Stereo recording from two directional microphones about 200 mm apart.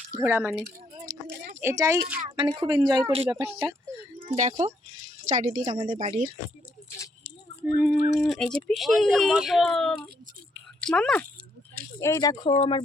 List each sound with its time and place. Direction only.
0.2 s speech: 10° right (ahead or behind)
1.3 s a sound: 55° right (ahead or behind)
1.6 s speech: 15° right (ahead or behind)
2.3 s a woman's voice: 25° right (ahead or behind)
6.0 s speech: 40° right (ahead or behind)
7.7 s speech: 5° right (ahead or behind)
11.9 s speech: 15° left (ahead or behind)